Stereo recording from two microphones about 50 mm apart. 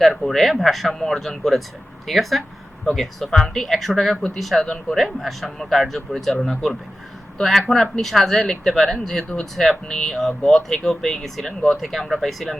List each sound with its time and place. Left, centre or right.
0.0 s speech: centre
4.6 s speech: centre
4.9 s speech: centre